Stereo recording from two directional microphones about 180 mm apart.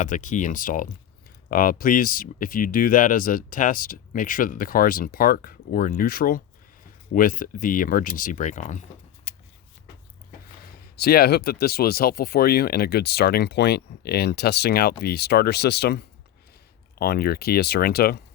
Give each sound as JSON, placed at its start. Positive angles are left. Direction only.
{"t": 0.0, "sound": "speech", "side_deg": 45}
{"t": 10.9, "sound": "speech", "side_deg": 60}